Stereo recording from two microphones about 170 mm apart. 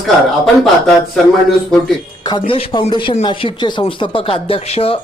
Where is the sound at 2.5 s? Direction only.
30° left (ahead or behind).